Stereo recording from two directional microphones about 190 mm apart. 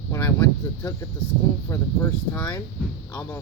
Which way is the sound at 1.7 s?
10° left (ahead or behind).